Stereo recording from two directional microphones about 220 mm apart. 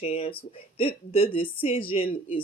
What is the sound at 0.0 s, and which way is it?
Speech, 25° left (ahead or behind).